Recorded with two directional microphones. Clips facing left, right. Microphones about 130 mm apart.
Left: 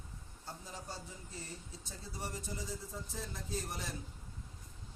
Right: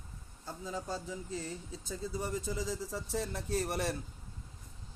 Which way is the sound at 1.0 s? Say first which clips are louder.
Right 9 dB; 90° right.